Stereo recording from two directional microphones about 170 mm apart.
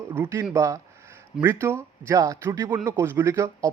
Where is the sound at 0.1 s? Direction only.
15° right (ahead or behind).